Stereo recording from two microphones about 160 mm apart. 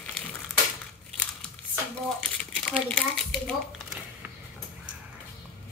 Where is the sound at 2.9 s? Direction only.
5° left (ahead or behind).